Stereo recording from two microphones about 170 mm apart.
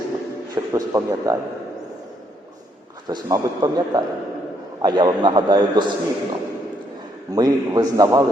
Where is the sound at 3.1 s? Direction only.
20° right (ahead or behind).